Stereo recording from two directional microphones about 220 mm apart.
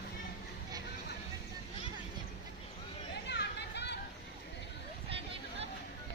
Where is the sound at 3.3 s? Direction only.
50° left (ahead or behind).